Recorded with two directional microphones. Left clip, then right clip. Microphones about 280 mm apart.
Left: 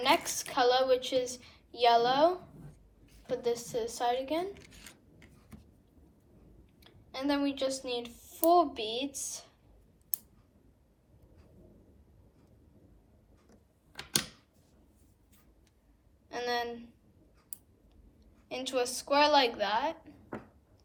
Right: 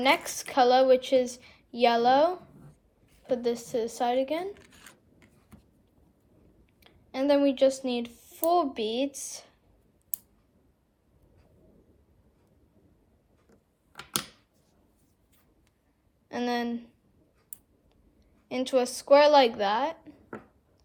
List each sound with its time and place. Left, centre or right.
0.0 s a woman's voice: right
4.5 s a sound: centre
6.7 s a woman's voice: right
16.3 s a woman's voice: right
18.4 s a woman's voice: right